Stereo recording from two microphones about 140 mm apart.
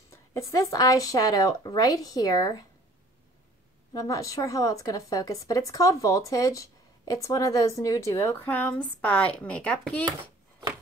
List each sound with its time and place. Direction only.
0.1 s speech: 20° left (ahead or behind)
3.9 s speech: 25° left (ahead or behind)